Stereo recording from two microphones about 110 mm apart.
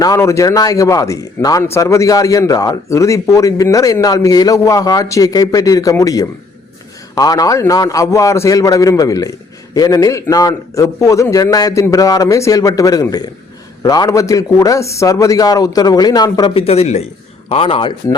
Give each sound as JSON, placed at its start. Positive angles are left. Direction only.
{"t": 0.0, "sound": "a man's voice", "side_deg": 30}
{"t": 16.6, "sound": "speech", "side_deg": 70}
{"t": 17.5, "sound": "speech", "side_deg": 55}